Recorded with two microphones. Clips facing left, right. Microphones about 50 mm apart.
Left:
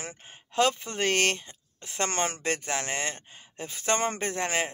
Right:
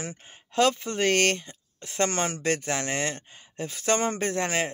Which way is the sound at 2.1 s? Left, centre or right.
Left.